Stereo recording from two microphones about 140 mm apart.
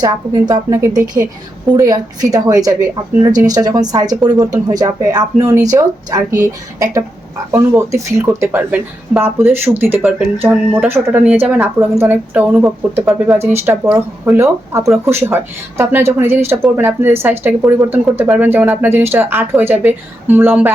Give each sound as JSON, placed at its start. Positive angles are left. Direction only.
{"t": 0.0, "sound": "speech", "side_deg": -25}
{"t": 13.8, "sound": "speech", "side_deg": -5}
{"t": 14.3, "sound": "speech", "side_deg": -20}